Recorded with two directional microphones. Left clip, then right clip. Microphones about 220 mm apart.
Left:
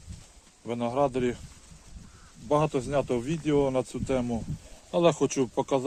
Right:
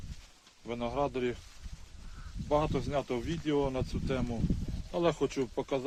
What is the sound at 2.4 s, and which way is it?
Speech, 50° left (ahead or behind).